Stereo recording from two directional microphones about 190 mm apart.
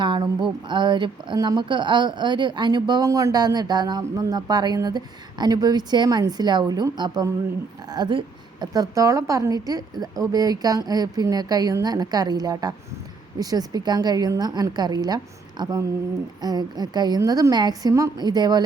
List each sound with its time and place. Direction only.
0.0 s speech: 25° right (ahead or behind)